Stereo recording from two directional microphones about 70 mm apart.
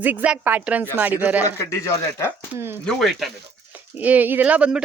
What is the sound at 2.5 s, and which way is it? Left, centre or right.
Speech, right.